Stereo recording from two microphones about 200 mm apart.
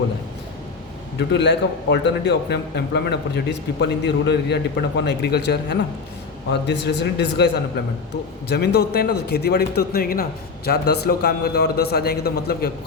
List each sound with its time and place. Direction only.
1.3 s a man's voice: 60° left (ahead or behind)